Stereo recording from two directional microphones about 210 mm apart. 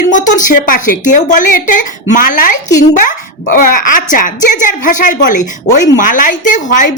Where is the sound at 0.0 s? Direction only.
35° left (ahead or behind).